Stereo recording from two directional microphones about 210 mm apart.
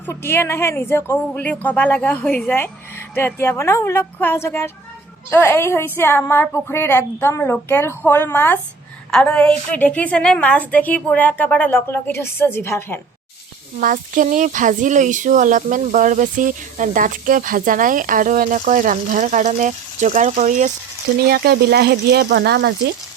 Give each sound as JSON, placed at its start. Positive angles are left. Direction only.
{"t": 0.0, "sound": "a woman's voice", "side_deg": 10}
{"t": 13.7, "sound": "speech", "side_deg": -40}
{"t": 21.2, "sound": "speech", "side_deg": -45}